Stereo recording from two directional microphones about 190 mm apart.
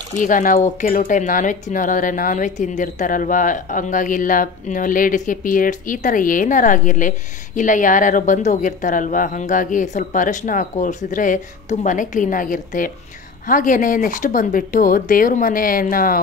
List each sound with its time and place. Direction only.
0.1 s speech: 45° left (ahead or behind)